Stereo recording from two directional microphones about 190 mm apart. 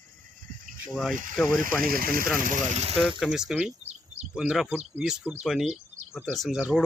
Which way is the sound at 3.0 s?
Centre (ahead or behind).